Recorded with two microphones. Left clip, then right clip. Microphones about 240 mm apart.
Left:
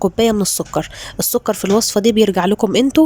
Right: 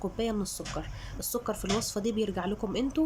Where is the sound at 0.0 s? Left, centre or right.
Left.